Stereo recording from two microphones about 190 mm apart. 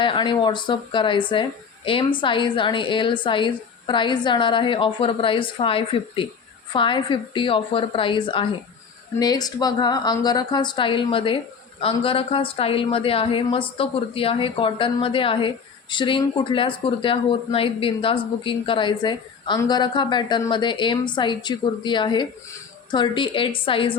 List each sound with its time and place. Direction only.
0.0 s a woman's voice: 25° left (ahead or behind)